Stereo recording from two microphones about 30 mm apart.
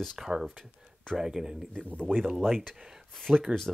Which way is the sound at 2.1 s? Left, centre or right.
Right.